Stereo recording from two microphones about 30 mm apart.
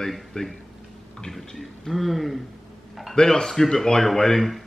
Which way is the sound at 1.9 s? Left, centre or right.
Centre.